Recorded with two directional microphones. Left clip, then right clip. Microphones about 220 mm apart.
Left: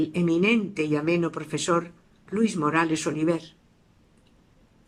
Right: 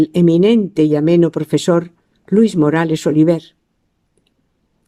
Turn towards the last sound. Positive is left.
turn(degrees=-45)  # may be behind; listen again after turning